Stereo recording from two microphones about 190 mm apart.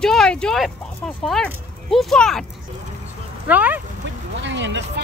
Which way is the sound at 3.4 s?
10° right (ahead or behind).